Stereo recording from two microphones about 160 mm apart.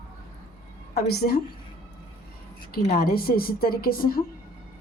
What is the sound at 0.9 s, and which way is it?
Speech, 90° left.